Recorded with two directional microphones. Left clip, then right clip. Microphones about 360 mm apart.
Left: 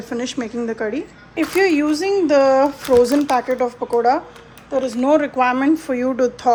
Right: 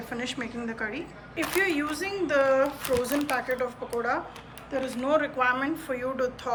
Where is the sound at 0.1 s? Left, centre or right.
Centre.